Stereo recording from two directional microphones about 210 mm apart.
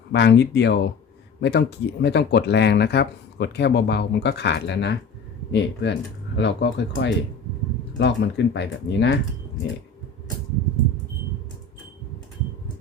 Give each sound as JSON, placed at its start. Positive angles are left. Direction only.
{"t": 0.1, "sound": "speech", "side_deg": 55}